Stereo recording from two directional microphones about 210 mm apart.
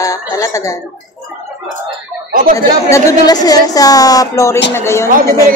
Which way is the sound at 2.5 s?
15° left (ahead or behind).